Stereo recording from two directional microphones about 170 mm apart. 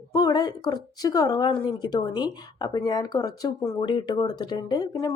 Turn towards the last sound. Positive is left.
turn(degrees=20)  # may be behind; listen again after turning